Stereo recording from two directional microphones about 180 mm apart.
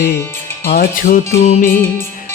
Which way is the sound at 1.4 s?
35° left (ahead or behind).